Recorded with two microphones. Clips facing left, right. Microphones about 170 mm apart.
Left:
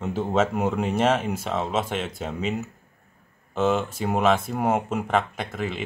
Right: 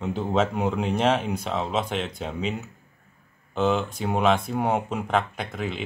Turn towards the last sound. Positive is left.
turn(degrees=0)  # may be behind; listen again after turning